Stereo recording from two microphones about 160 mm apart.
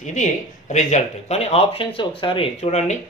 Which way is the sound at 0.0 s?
50° left (ahead or behind).